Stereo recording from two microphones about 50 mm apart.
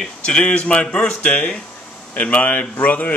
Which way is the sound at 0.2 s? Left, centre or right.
Centre.